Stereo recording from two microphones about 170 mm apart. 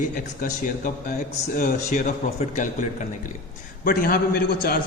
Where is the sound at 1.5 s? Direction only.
55° left (ahead or behind).